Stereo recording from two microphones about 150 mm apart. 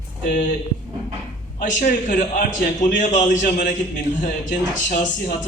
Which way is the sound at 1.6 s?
60° left (ahead or behind).